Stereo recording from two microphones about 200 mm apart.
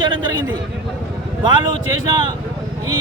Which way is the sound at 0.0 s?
20° right (ahead or behind).